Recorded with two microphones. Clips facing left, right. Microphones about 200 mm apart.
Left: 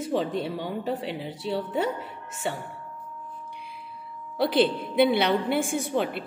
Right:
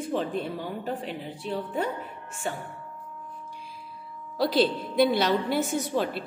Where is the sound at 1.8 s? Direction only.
80° left.